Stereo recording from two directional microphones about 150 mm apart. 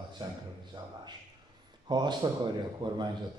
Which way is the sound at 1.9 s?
30° right (ahead or behind).